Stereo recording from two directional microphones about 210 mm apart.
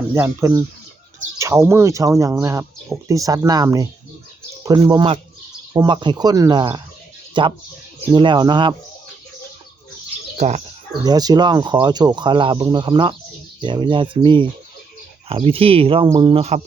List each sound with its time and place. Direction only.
0.1 s speech: 15° right (ahead or behind)
10.3 s speech: 35° right (ahead or behind)
11.0 s speech: 20° right (ahead or behind)